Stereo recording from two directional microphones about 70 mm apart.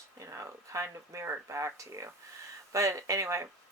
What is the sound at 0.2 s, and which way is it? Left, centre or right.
Speech, right.